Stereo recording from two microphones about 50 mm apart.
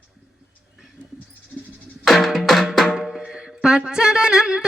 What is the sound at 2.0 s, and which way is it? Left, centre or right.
Music, centre.